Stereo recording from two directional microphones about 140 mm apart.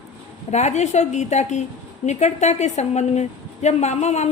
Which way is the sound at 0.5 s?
55° left (ahead or behind).